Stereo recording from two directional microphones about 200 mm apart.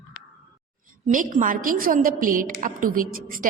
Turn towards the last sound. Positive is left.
turn(degrees=-45)  # may be behind; listen again after turning